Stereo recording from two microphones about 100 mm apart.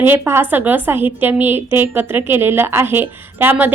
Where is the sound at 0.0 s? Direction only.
25° right (ahead or behind).